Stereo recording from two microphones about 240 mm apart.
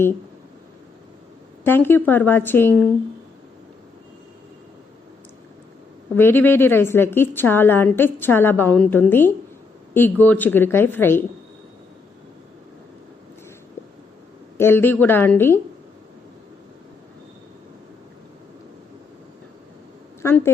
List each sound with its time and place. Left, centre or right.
1.6 s a woman's voice: centre
6.1 s a woman's voice: centre
14.6 s a woman's voice: centre
20.2 s a woman's voice: centre